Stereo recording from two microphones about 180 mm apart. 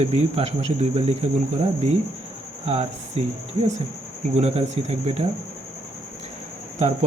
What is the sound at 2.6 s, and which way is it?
Speech, 35° right (ahead or behind).